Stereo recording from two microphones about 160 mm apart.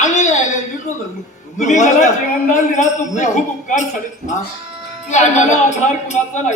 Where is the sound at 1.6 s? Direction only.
50° left (ahead or behind).